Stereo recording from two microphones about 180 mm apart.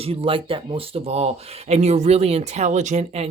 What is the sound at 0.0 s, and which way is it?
Speech, 30° right (ahead or behind).